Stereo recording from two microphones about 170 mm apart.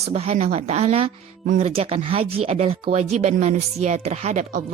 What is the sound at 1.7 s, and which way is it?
Speech, 35° right (ahead or behind).